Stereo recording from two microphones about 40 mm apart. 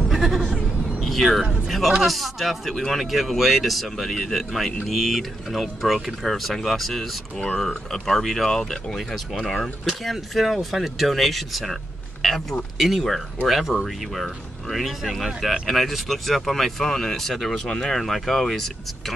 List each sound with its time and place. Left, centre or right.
0.1 s bleat: centre
0.9 s vehicle: centre
1.7 s a man's voice: centre
12.7 s speech: centre
17.6 s speech: centre
17.9 s speech: centre